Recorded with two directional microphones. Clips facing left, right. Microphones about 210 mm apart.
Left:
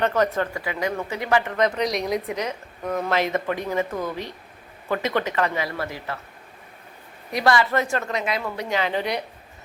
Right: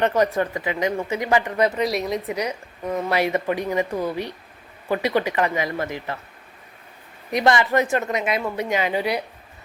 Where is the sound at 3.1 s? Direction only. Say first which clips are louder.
Right 3 dB; 10° right (ahead or behind).